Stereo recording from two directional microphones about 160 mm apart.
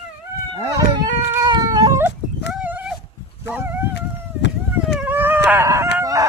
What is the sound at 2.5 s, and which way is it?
Dog, 10° right (ahead or behind).